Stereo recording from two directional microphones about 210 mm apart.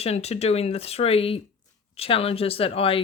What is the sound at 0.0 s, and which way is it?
Speech, 30° left (ahead or behind).